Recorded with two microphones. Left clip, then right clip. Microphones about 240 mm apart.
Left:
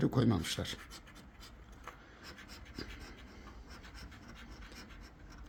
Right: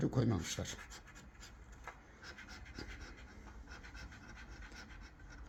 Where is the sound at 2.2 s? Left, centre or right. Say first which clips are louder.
Right 1 dB; centre.